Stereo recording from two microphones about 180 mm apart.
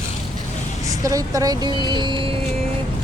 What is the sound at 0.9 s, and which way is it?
Speech, 20° right (ahead or behind).